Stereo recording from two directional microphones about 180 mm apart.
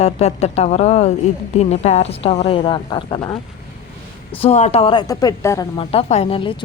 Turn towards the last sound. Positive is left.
turn(degrees=30)  # may be behind; listen again after turning